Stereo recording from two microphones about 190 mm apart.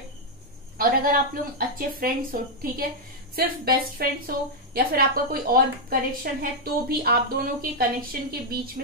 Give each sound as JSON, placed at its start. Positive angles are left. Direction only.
{"t": 0.7, "sound": "a woman's voice", "side_deg": -50}